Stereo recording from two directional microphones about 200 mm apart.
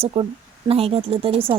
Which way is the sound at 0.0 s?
25° right (ahead or behind).